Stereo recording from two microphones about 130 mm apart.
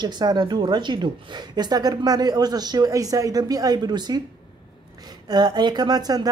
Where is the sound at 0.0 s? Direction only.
35° right (ahead or behind).